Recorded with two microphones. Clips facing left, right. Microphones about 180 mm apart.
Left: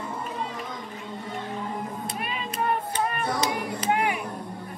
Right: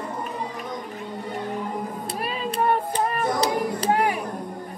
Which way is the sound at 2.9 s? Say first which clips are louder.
Right 3 dB; 35° right (ahead or behind).